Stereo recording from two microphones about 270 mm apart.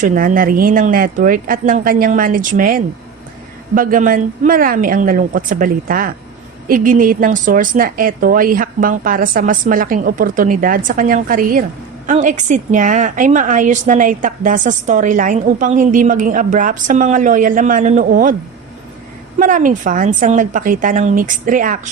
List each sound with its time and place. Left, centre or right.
0.0 s a woman's voice: right
19.4 s a woman's voice: right